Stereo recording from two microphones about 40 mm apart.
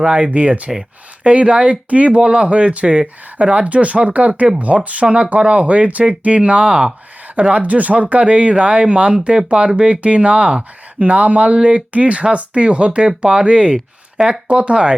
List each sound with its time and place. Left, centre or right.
0.0 s speech: right
7.5 s speech: right
11.0 s speech: right